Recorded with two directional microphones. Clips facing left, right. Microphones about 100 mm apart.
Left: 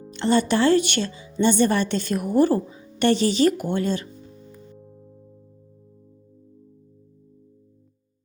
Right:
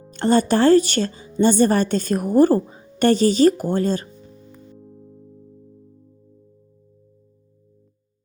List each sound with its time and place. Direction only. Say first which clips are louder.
0.1 s a woman's voice: right 3 dB; 45° right (ahead or behind)
4.8 s music: right 3 dB; 5° left (ahead or behind)